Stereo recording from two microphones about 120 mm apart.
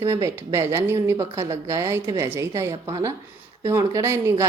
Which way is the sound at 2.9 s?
35° right (ahead or behind).